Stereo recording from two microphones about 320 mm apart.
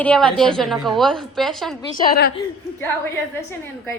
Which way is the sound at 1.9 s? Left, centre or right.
Left.